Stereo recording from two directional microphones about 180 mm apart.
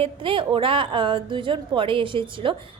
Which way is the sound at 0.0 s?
30° right (ahead or behind).